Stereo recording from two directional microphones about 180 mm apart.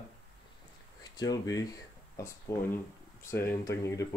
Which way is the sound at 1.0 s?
20° left (ahead or behind).